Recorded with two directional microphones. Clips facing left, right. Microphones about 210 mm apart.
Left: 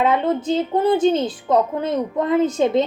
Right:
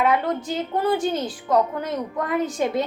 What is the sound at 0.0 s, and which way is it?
A woman's voice, 25° left (ahead or behind).